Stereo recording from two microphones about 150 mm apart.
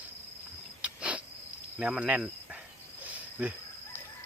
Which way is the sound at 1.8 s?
5° right (ahead or behind).